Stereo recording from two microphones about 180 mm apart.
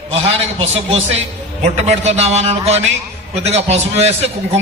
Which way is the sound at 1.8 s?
40° right (ahead or behind).